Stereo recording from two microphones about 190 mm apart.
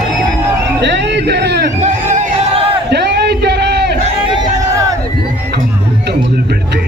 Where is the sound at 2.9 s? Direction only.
60° right (ahead or behind).